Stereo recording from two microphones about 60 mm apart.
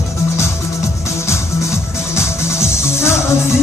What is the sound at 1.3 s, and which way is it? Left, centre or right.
Music, left.